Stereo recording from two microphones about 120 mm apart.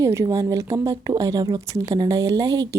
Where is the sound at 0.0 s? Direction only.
25° right (ahead or behind).